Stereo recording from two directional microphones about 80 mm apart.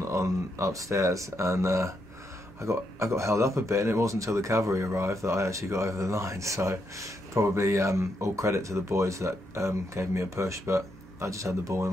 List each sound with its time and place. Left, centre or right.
0.0 s speech: right